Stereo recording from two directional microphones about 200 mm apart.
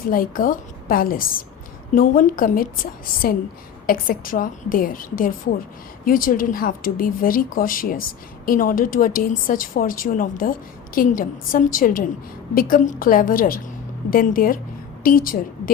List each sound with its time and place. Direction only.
0.0 s a woman's voice: 45° left (ahead or behind)